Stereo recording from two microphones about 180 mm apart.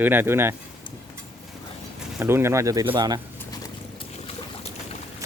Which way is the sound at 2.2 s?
15° right (ahead or behind).